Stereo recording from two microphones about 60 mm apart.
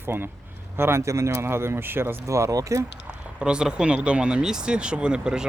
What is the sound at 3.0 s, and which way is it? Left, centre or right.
Speech, centre.